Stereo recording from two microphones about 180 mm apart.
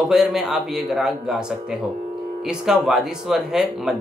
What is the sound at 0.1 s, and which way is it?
Speech, centre (ahead or behind).